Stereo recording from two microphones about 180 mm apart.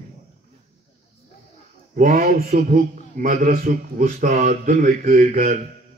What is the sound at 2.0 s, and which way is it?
A man's voice, 55° right (ahead or behind).